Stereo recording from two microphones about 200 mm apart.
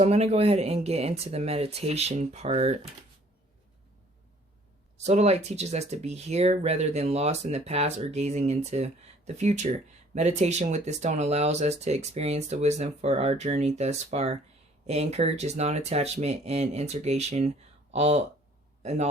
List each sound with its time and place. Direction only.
0.0 s speech: 30° right (ahead or behind)
4.9 s a man's voice: 35° right (ahead or behind)